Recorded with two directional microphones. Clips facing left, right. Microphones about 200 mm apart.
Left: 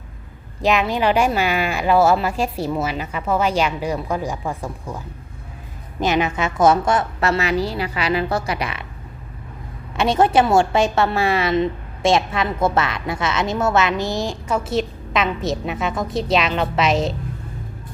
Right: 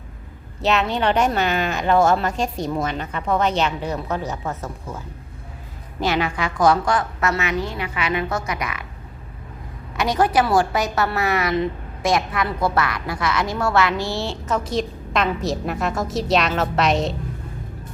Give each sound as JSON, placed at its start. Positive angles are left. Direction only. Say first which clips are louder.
{"t": 0.6, "sound": "a woman's voice", "louder": "left 2 dB", "side_deg": 10}
{"t": 10.0, "sound": "a woman's voice", "louder": "left 3 dB", "side_deg": 25}